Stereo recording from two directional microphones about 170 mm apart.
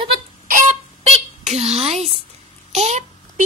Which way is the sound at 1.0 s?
40° right (ahead or behind).